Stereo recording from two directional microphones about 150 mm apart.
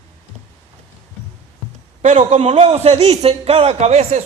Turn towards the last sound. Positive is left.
turn(degrees=-45)  # may be behind; listen again after turning